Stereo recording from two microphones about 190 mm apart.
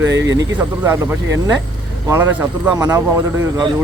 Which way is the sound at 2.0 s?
10° right (ahead or behind).